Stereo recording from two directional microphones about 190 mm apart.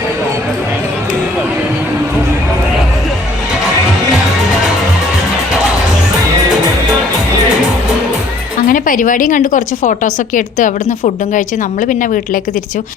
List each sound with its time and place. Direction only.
8.6 s a woman's voice: 45° left (ahead or behind)